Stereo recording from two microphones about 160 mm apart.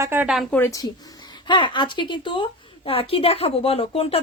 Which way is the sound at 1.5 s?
30° left (ahead or behind).